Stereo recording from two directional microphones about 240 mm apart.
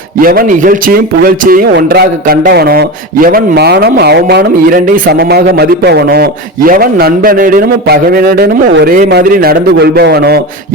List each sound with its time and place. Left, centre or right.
0.2 s a man's voice: right